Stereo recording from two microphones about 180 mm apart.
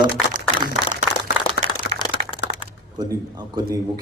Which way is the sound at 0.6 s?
70° left (ahead or behind).